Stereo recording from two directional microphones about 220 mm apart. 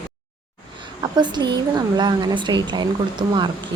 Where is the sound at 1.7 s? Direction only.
20° right (ahead or behind).